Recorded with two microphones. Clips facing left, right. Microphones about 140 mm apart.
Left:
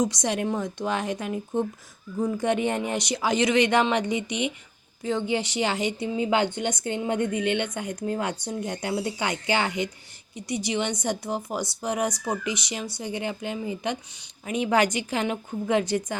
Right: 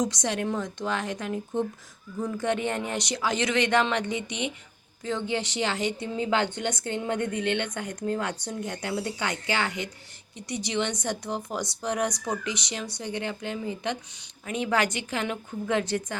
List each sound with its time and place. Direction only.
0.0 s a woman's voice: 10° left (ahead or behind)